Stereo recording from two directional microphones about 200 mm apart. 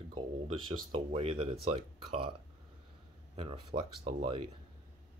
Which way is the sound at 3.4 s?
30° right (ahead or behind).